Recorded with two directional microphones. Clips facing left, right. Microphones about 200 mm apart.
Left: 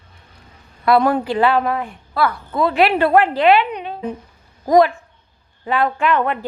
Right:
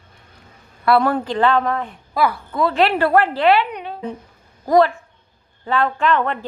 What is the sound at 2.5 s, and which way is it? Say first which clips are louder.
A woman's voice: left 3 dB; 15° left (ahead or behind).